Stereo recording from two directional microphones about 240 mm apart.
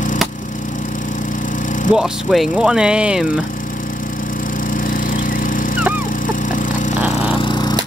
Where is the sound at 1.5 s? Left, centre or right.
Left.